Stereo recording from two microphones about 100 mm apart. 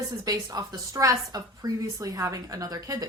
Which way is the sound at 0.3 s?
35° right (ahead or behind).